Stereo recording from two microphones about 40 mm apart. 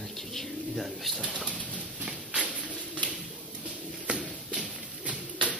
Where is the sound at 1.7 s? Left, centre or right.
Right.